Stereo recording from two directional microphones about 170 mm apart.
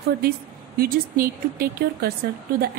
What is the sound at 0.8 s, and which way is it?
A woman's voice, 65° right (ahead or behind).